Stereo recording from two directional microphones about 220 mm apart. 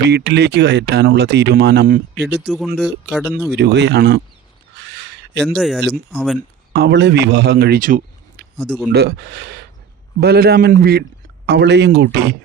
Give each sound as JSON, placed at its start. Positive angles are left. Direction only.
{"t": 0.0, "sound": "speech", "side_deg": -50}
{"t": 2.4, "sound": "speech", "side_deg": 0}
{"t": 3.6, "sound": "speech", "side_deg": -50}
{"t": 4.8, "sound": "crow", "side_deg": -50}
{"t": 5.4, "sound": "speech", "side_deg": 0}
{"t": 6.7, "sound": "speech", "side_deg": -50}
{"t": 8.6, "sound": "speech", "side_deg": 0}
{"t": 8.9, "sound": "speech", "side_deg": -50}